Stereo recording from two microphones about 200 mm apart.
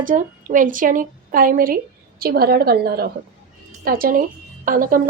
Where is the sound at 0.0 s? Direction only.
40° right (ahead or behind).